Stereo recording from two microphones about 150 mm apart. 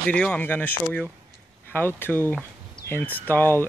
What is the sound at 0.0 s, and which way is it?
Speech, 10° left (ahead or behind).